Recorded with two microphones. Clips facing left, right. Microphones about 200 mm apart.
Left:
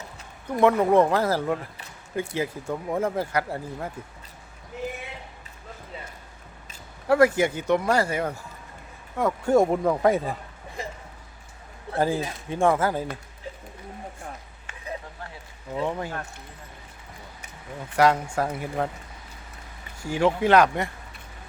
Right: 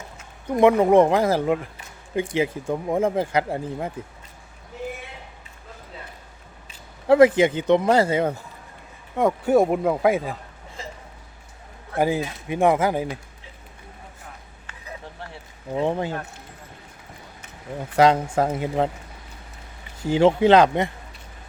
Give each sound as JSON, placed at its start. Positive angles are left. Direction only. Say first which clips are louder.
{"t": 0.5, "sound": "speech", "louder": "right 4 dB", "side_deg": -20}
{"t": 7.1, "sound": "speech", "louder": "right 5 dB", "side_deg": -20}
{"t": 9.4, "sound": "speech", "louder": "even", "side_deg": -10}
{"t": 11.9, "sound": "speech", "louder": "right 2 dB", "side_deg": -15}
{"t": 15.7, "sound": "speech", "louder": "right 5 dB", "side_deg": -30}
{"t": 17.9, "sound": "speech", "louder": "right 4 dB", "side_deg": -25}
{"t": 20.0, "sound": "speech", "louder": "right 6 dB", "side_deg": -25}